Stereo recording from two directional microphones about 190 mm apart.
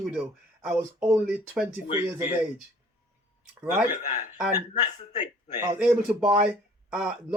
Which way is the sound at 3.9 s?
40° left (ahead or behind).